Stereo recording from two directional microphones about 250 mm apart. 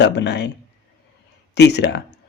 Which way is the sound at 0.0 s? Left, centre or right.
Left.